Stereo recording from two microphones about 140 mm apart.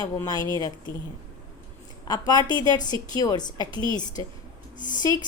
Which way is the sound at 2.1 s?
30° left (ahead or behind).